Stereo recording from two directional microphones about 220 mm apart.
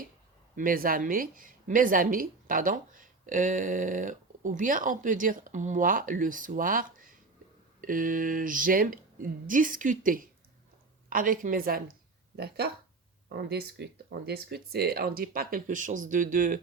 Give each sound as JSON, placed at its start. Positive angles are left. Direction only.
{"t": 0.5, "sound": "speech", "side_deg": -40}